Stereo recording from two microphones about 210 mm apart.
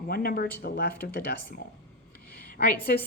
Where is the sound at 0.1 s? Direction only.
45° left (ahead or behind).